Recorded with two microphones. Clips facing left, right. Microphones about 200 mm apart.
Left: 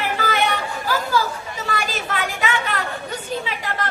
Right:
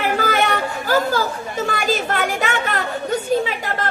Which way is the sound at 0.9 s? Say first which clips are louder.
Right 3 dB; 50° right (ahead or behind).